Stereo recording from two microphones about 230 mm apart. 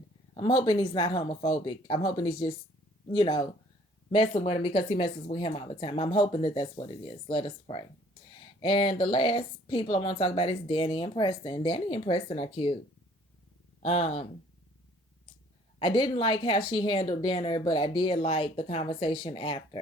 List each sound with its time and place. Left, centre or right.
0.3 s speech: centre
13.8 s speech: left
15.8 s speech: centre